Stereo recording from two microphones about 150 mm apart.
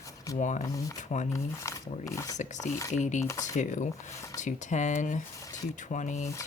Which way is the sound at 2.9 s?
50° left (ahead or behind).